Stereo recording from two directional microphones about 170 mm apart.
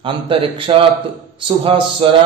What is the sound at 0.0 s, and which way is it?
A man's voice, 30° right (ahead or behind).